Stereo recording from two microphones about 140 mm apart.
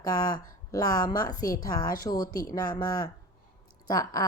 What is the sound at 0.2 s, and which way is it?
A woman's voice, 25° left (ahead or behind).